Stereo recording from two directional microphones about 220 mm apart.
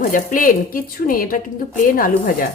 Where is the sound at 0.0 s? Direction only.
40° left (ahead or behind).